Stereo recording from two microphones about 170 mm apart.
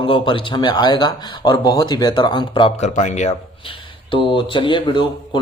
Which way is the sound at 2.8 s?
45° left (ahead or behind).